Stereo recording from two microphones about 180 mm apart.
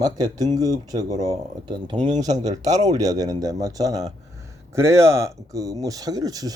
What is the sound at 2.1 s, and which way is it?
Speech, 40° right (ahead or behind).